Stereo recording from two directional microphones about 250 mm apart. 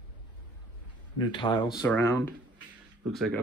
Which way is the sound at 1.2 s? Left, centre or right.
Centre.